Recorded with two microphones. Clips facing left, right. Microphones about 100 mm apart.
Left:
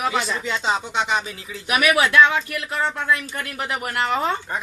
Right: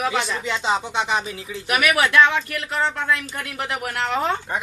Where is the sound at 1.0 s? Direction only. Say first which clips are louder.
Even; 25° right (ahead or behind).